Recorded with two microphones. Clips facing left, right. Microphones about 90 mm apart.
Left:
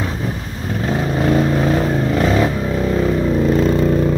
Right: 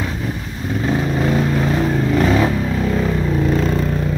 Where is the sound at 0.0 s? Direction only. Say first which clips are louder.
Left 1 dB; 20° left (ahead or behind).